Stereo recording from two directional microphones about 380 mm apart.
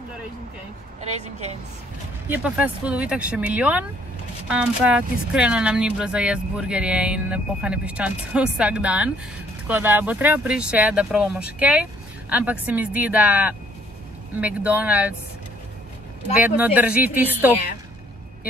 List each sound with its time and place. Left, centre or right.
1.1 s a woman's voice: centre
2.2 s speech: centre
16.5 s speech: centre